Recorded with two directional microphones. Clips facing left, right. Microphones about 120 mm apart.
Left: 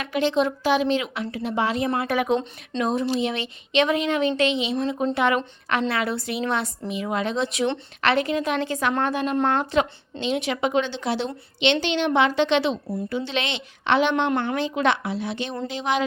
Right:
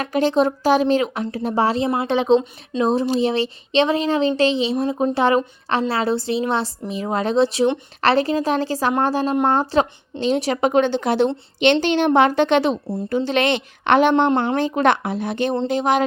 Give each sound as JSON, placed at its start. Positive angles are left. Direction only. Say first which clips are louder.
{"t": 0.0, "sound": "a woman's voice", "louder": "right 4 dB", "side_deg": -40}
{"t": 14.3, "sound": "speech", "louder": "right 5 dB", "side_deg": -35}